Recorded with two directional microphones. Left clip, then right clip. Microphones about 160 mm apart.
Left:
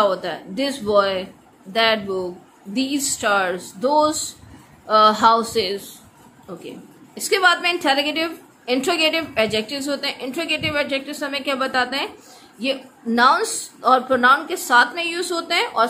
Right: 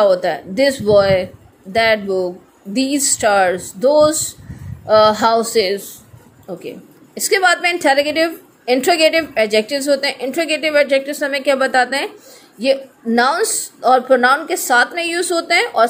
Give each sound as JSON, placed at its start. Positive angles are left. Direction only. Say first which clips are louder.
{"t": 0.0, "sound": "a woman's voice", "louder": "right 6 dB", "side_deg": -30}
{"t": 7.2, "sound": "a woman's voice", "louder": "right 3 dB", "side_deg": -30}